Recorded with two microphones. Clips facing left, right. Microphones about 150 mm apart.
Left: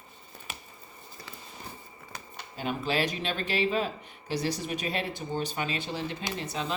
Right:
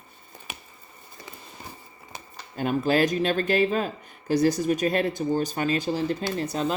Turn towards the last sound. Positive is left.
turn(degrees=-45)  # may be behind; listen again after turning